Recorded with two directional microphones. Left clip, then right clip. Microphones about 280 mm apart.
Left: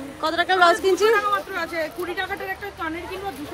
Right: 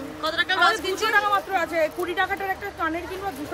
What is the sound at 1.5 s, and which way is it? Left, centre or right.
Speech, right.